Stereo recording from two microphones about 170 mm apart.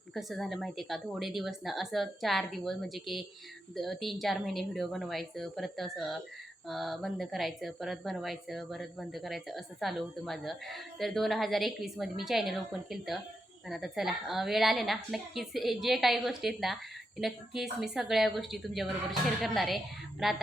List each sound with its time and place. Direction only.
0.1 s a woman's voice: centre (ahead or behind)